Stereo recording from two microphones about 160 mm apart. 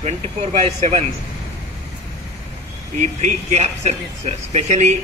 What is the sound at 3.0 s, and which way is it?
Speech, 45° right (ahead or behind).